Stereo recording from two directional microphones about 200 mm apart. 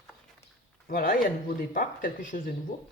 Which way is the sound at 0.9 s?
45° left (ahead or behind).